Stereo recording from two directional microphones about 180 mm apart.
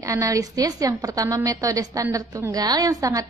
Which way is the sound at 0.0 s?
20° right (ahead or behind).